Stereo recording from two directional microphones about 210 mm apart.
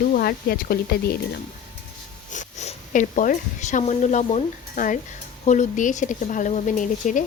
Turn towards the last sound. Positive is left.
turn(degrees=35)  # may be behind; listen again after turning